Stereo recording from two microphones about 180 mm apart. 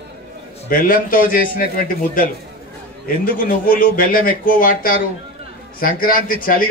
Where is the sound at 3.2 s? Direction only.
50° left (ahead or behind).